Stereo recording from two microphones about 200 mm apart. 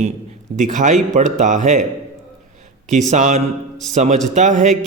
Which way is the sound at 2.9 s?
35° right (ahead or behind).